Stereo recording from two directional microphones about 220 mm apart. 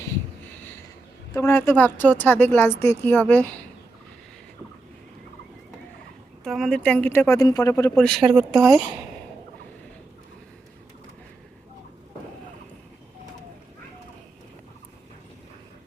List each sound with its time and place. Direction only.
1.3 s a woman's voice: 10° left (ahead or behind)
6.4 s a woman's voice: centre (ahead or behind)
8.6 s speech: 15° right (ahead or behind)